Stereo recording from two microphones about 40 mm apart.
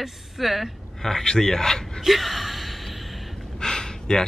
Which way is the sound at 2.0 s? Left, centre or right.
Centre.